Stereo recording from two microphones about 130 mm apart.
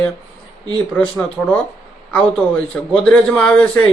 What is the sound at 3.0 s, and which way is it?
Speech, 10° left (ahead or behind).